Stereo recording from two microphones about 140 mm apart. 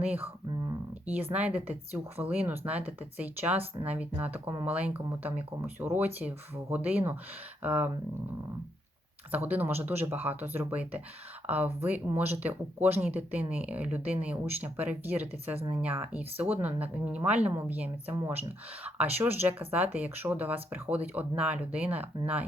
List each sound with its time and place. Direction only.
0.0 s speech: 10° right (ahead or behind)
9.3 s speech: 15° right (ahead or behind)
15.5 s speech: 40° right (ahead or behind)
15.8 s speech: 10° right (ahead or behind)